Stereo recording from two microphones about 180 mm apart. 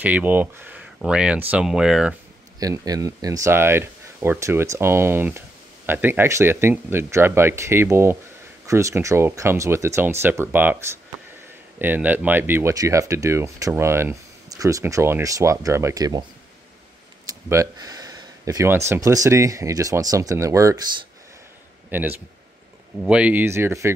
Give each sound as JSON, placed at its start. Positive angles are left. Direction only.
{"t": 0.0, "sound": "speech", "side_deg": -10}
{"t": 2.6, "sound": "speech", "side_deg": -20}
{"t": 11.8, "sound": "speech", "side_deg": -10}
{"t": 17.5, "sound": "a sound", "side_deg": -20}
{"t": 18.9, "sound": "speech", "side_deg": -15}
{"t": 21.9, "sound": "speech", "side_deg": -10}